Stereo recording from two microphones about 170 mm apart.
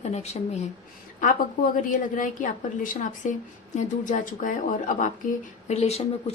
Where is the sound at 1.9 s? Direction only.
50° left (ahead or behind).